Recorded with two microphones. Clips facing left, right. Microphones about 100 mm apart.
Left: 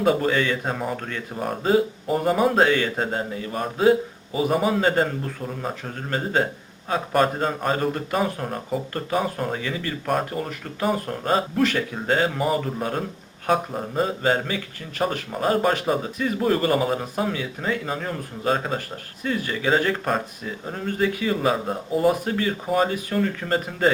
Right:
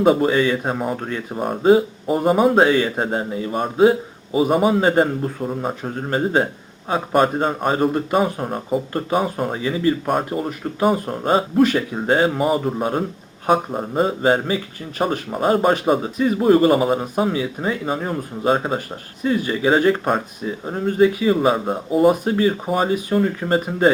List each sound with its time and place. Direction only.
0.0 s speech: 20° right (ahead or behind)
2.2 s speech: 10° right (ahead or behind)